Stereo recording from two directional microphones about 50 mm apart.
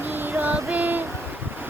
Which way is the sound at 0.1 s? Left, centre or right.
Right.